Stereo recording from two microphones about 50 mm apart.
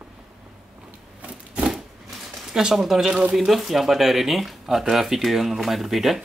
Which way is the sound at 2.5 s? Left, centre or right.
Centre.